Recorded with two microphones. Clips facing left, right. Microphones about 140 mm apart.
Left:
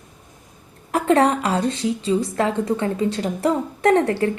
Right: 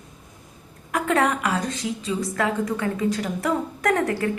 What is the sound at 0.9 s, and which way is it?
A woman's voice, 30° left (ahead or behind).